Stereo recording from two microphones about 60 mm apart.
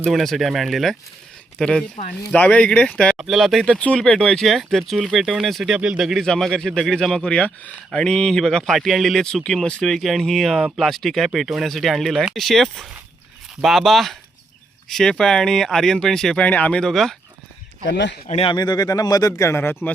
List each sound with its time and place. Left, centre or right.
0.1 s speech: centre
1.5 s speech: centre
3.2 s speech: centre
3.8 s speech: left
4.4 s speech: centre
5.7 s speech: centre
6.0 s a man's voice: centre
6.2 s speech: centre
8.0 s speech: centre
9.2 s speech: centre
16.4 s speech: left
16.7 s speech: centre
18.8 s speech: left
19.4 s speech: left